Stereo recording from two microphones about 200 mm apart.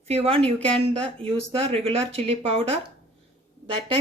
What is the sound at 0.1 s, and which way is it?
Speech, 30° right (ahead or behind).